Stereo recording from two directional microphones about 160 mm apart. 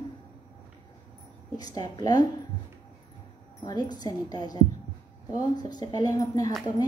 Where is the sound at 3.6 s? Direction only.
25° left (ahead or behind).